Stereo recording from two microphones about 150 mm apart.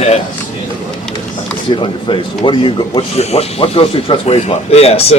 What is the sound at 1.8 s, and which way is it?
Speech, 35° left (ahead or behind).